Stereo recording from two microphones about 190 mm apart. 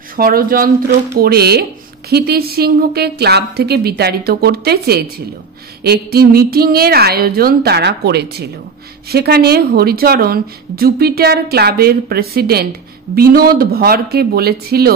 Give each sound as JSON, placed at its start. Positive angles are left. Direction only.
{"t": 0.1, "sound": "a woman's voice", "side_deg": -50}